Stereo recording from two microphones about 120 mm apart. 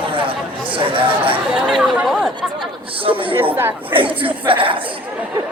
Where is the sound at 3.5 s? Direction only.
15° right (ahead or behind).